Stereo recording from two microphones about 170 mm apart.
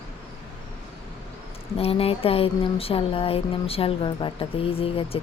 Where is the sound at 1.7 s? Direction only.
35° left (ahead or behind).